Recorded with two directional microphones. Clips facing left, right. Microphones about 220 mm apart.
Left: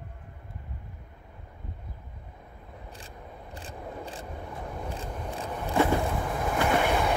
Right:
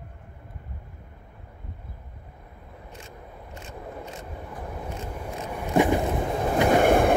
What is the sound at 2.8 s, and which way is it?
Vehicle, 35° left (ahead or behind).